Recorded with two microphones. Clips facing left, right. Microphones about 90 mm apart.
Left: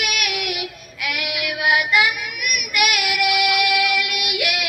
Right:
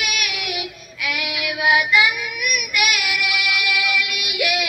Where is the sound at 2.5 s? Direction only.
55° left (ahead or behind).